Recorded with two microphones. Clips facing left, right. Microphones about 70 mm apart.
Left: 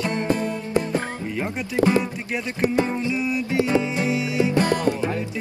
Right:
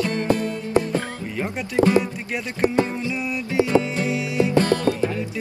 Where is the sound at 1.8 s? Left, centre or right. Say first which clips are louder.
Right 2 dB; right.